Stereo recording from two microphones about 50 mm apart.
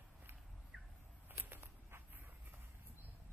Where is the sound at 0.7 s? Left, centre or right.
Centre.